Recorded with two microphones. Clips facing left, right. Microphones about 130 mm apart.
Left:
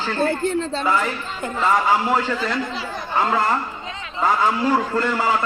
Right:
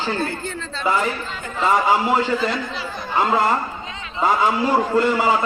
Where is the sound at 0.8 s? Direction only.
20° right (ahead or behind).